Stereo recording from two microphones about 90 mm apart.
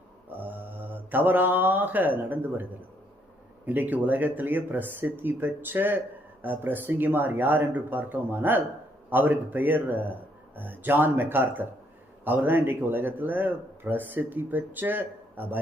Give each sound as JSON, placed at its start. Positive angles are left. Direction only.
{"t": 0.3, "sound": "mantra", "side_deg": -20}
{"t": 3.7, "sound": "speech", "side_deg": -20}